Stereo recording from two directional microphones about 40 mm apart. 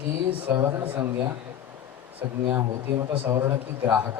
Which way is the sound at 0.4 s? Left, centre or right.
Right.